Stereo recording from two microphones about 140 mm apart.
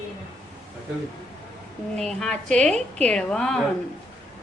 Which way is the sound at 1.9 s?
5° left (ahead or behind).